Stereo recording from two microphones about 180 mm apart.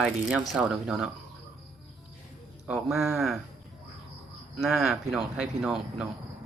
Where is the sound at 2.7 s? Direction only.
5° right (ahead or behind).